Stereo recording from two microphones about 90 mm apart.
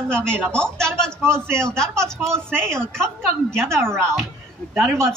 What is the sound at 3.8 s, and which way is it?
Speech, 25° right (ahead or behind).